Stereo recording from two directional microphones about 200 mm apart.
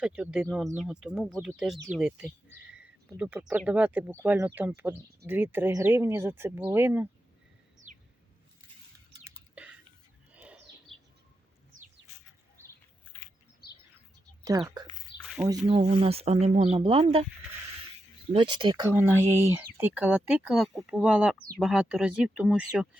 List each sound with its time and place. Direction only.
0.0 s speech: 5° right (ahead or behind)
9.6 s a sound: 5° right (ahead or behind)
10.3 s bird: 5° right (ahead or behind)
13.6 s bird: 50° left (ahead or behind)
14.5 s speech: 20° right (ahead or behind)
15.2 s a sound: centre (ahead or behind)
15.6 s speech: 30° right (ahead or behind)
18.3 s speech: 25° right (ahead or behind); by 22.9 s 5° right (ahead or behind)